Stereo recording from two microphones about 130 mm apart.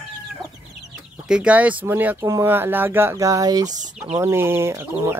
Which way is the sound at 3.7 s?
70° right (ahead or behind).